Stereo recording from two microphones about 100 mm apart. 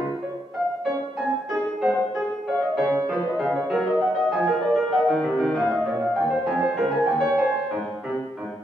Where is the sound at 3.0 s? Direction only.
5° right (ahead or behind).